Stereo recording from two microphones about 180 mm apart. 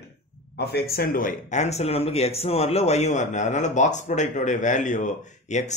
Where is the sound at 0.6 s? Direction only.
65° left (ahead or behind).